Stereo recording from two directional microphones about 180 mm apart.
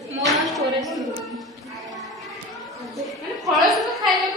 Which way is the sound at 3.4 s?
Centre (ahead or behind).